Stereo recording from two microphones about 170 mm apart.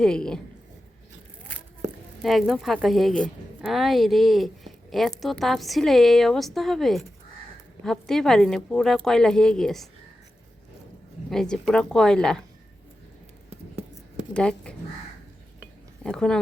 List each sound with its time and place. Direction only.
0.0 s speech: 5° left (ahead or behind)
2.2 s speech: centre (ahead or behind)
11.3 s speech: 5° left (ahead or behind)
13.5 s a sound: 40° right (ahead or behind)
14.3 s speech: 5° left (ahead or behind)
16.0 s speech: 5° left (ahead or behind)